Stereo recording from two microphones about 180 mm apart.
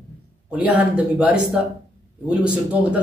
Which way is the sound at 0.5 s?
10° right (ahead or behind).